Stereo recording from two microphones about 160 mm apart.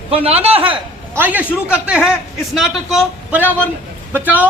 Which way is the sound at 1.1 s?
10° right (ahead or behind).